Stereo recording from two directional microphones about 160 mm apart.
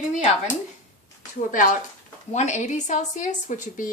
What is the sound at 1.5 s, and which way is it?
A woman's voice, 55° left (ahead or behind).